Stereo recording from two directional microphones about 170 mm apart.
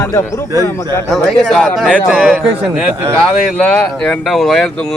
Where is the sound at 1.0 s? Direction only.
Centre (ahead or behind).